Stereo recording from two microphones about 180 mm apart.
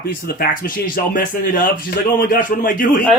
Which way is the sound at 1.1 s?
50° left (ahead or behind).